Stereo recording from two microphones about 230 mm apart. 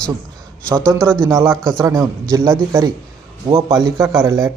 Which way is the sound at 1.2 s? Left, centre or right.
Centre.